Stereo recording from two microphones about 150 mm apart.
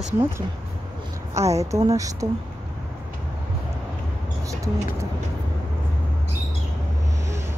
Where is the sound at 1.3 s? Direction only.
20° right (ahead or behind).